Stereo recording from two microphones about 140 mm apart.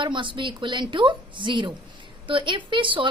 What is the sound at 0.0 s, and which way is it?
A woman's voice, 35° right (ahead or behind).